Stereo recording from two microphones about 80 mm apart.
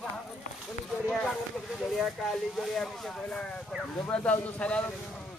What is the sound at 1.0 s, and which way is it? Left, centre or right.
Speech, centre.